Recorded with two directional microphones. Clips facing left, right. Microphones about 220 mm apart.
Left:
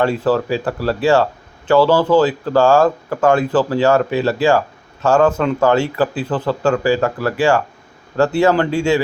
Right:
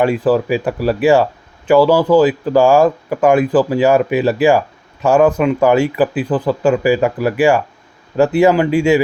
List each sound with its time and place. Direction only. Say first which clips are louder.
0.3 s speech: right 3 dB; 15° right (ahead or behind)